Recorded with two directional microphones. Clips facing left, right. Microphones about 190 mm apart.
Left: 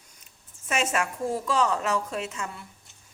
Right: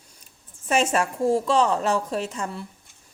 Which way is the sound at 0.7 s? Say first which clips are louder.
Right 5 dB; 35° right (ahead or behind).